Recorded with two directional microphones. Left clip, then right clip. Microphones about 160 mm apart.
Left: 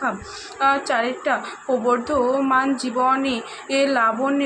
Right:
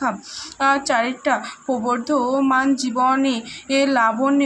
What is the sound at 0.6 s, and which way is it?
A woman's voice, 20° right (ahead or behind).